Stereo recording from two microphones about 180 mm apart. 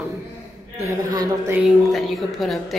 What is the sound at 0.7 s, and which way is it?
Speech, 15° right (ahead or behind).